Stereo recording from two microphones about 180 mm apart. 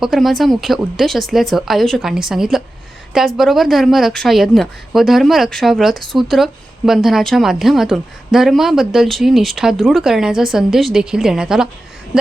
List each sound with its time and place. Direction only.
0.0 s a woman's voice: centre (ahead or behind)